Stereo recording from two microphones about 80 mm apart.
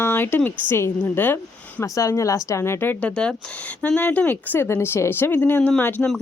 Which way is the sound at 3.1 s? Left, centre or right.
Centre.